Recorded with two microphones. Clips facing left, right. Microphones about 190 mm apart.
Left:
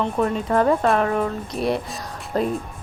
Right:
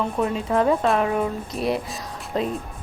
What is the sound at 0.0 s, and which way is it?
A woman's voice, 5° right (ahead or behind).